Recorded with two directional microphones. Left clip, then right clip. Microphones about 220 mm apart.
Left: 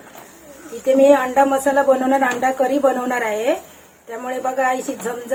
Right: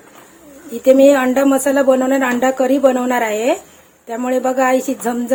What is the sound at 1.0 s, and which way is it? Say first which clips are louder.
A woman's voice: left 3 dB; 50° right (ahead or behind).